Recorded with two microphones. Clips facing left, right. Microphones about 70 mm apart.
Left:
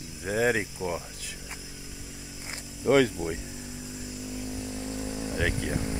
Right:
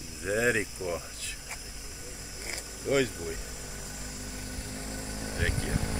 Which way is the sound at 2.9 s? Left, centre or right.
Left.